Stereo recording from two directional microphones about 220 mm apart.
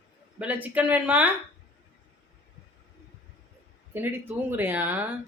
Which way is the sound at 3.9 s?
10° right (ahead or behind).